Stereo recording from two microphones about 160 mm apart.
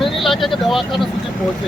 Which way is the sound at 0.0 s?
Centre (ahead or behind).